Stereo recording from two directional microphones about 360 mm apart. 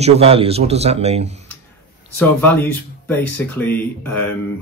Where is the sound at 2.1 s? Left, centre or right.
Centre.